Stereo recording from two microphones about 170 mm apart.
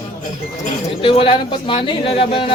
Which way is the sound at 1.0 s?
30° left (ahead or behind).